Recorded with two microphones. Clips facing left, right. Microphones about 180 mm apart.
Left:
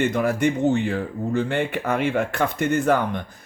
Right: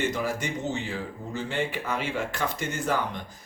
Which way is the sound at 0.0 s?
60° left (ahead or behind).